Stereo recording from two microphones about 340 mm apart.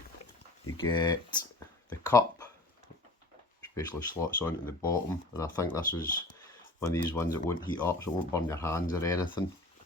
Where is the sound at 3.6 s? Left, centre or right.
Centre.